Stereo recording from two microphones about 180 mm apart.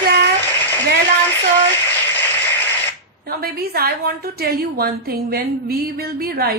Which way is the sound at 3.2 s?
60° right (ahead or behind).